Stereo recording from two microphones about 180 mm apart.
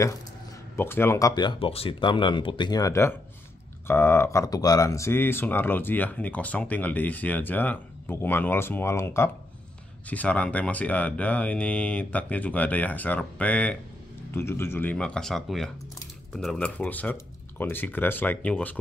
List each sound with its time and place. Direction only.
0.7 s speech: 10° left (ahead or behind)